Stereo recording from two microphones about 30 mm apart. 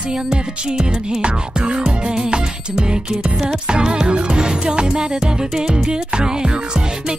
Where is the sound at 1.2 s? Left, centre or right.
Right.